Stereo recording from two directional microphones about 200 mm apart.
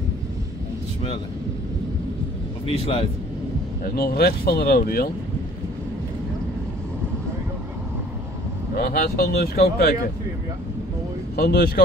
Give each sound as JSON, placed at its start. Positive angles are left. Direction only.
{"t": 2.8, "sound": "speech", "side_deg": 25}
{"t": 3.8, "sound": "speech", "side_deg": 50}
{"t": 8.7, "sound": "speech", "side_deg": 50}
{"t": 11.3, "sound": "speech", "side_deg": 50}